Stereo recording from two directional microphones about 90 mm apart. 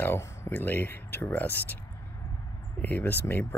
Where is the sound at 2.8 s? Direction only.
20° left (ahead or behind).